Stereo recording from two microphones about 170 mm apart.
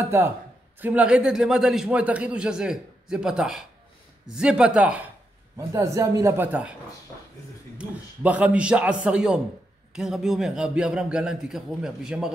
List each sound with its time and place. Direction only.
0.0 s a man's voice: 15° right (ahead or behind)
5.6 s a man's voice: 15° right (ahead or behind)
7.7 s a man's voice: 10° right (ahead or behind)